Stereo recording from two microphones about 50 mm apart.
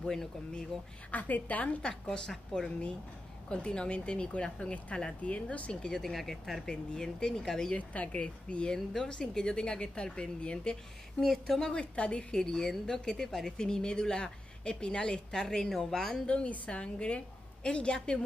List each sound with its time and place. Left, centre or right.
1.1 s a woman's voice: left
1.8 s a woman's voice: centre
5.9 s speech: centre
6.7 s a woman's voice: centre
7.7 s speech: left
8.7 s a woman's voice: centre
11.1 s speech: centre
11.7 s a woman's voice: left
16.3 s a woman's voice: left